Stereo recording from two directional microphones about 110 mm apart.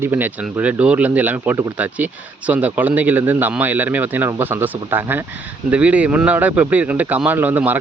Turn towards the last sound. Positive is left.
turn(degrees=-15)  # may be behind; listen again after turning